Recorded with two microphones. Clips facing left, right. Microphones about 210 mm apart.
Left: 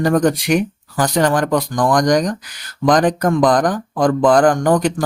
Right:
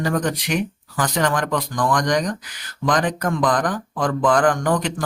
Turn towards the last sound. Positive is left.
turn(degrees=40)  # may be behind; listen again after turning